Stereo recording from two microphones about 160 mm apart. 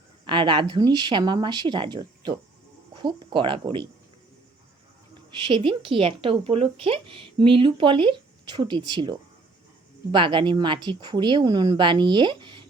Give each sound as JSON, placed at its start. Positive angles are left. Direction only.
{"t": 0.3, "sound": "a woman's voice", "side_deg": -30}
{"t": 5.5, "sound": "a woman's voice", "side_deg": -30}